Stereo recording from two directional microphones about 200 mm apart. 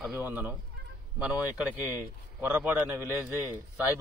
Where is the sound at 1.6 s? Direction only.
5° right (ahead or behind).